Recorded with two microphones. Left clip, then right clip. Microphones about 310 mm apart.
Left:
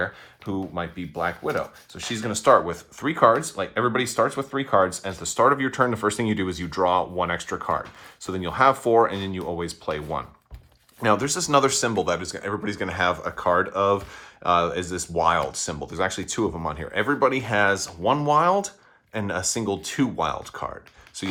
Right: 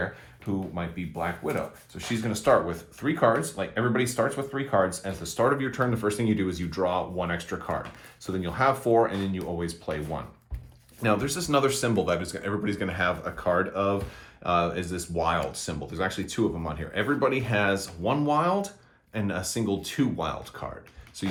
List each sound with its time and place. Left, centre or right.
0.4 s speech: left